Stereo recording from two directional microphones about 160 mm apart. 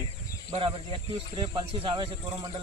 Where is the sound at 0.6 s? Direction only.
30° right (ahead or behind).